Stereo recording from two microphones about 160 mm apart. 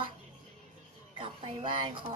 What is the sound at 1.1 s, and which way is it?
Speech, 30° right (ahead or behind).